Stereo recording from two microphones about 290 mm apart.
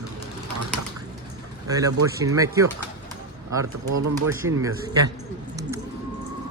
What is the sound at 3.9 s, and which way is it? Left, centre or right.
Speech, right.